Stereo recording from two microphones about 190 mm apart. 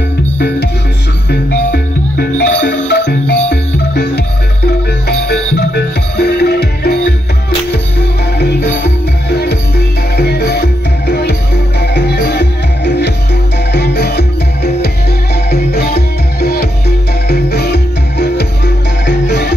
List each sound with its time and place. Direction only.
1.3 s music: 55° left (ahead or behind)
8.4 s music: 60° left (ahead or behind)